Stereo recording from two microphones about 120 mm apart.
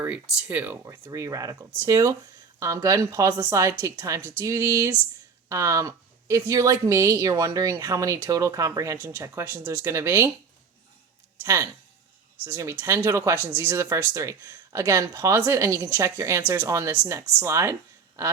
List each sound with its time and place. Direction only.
0.0 s speech: 15° right (ahead or behind)
11.4 s speech: 25° right (ahead or behind)